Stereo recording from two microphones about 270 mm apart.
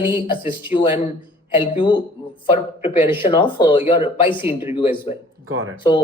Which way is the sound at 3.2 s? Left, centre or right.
Centre.